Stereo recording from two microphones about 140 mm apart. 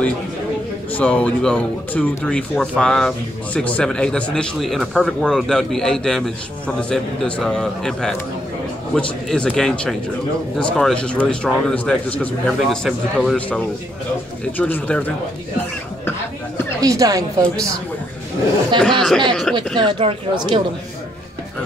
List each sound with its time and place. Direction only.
0.9 s a man's voice: 10° left (ahead or behind)
14.6 s a man's voice: 10° left (ahead or behind)
16.8 s a woman's voice: 25° right (ahead or behind)
18.8 s speech: 5° left (ahead or behind)
19.8 s speech: 35° right (ahead or behind)